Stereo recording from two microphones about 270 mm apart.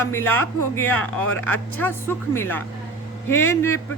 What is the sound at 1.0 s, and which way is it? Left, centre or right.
Speech, left.